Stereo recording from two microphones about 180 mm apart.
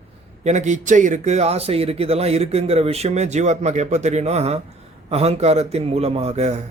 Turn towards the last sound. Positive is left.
turn(degrees=-35)  # may be behind; listen again after turning